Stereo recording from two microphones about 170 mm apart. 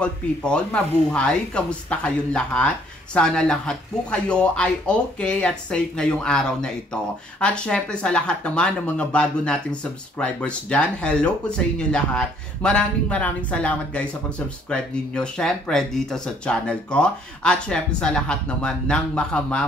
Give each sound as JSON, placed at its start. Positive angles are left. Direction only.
{"t": 0.0, "sound": "speech", "side_deg": 5}